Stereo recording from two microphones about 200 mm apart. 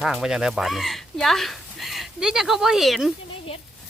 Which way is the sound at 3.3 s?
30° left (ahead or behind).